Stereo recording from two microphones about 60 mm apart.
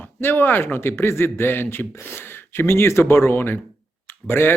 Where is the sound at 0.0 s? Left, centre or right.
Left.